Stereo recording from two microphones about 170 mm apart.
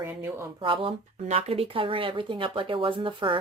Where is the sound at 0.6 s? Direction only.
30° right (ahead or behind).